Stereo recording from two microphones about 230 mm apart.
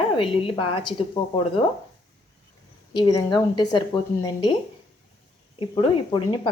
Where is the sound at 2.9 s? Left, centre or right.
Centre.